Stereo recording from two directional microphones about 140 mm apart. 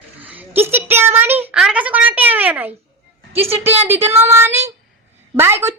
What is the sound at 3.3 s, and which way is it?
Speech, 45° right (ahead or behind).